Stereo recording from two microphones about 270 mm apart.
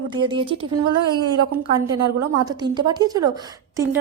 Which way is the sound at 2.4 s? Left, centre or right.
Centre.